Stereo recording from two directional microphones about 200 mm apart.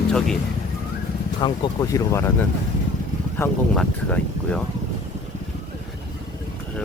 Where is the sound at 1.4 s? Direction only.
20° left (ahead or behind).